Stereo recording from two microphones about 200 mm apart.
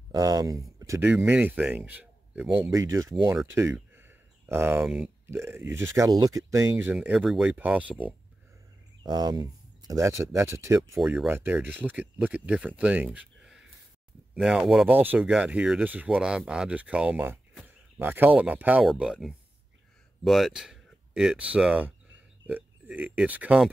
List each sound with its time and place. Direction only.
0.1 s speech: 15° right (ahead or behind)
1.1 s speech: 5° right (ahead or behind)
9.0 s speech: 20° right (ahead or behind)
11.0 s speech: centre (ahead or behind)